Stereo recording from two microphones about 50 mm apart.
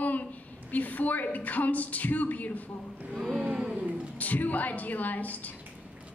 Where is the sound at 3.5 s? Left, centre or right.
Centre.